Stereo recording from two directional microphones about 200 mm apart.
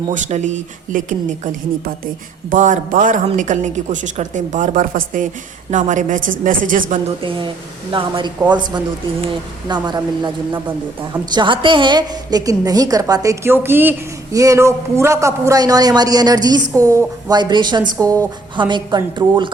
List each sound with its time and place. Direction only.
0.1 s a woman's voice: 35° right (ahead or behind)
2.5 s a woman's voice: 40° right (ahead or behind)
7.2 s a woman's voice: 25° right (ahead or behind)